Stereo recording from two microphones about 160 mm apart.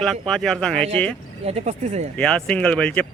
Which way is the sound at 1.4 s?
40° right (ahead or behind).